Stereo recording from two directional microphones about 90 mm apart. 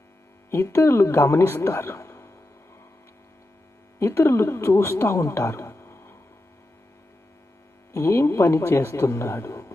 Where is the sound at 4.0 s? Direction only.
25° left (ahead or behind).